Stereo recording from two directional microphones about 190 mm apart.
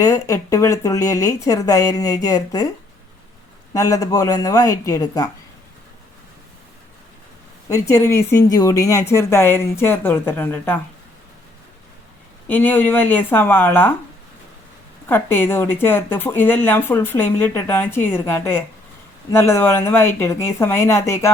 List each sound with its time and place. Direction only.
0.0 s a woman's voice: 15° left (ahead or behind)
3.7 s a woman's voice: 15° left (ahead or behind)
7.7 s a woman's voice: 15° left (ahead or behind)
12.5 s a woman's voice: 10° left (ahead or behind)
15.1 s a woman's voice: 10° left (ahead or behind)